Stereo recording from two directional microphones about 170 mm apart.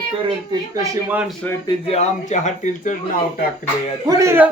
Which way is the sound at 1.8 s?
40° left (ahead or behind).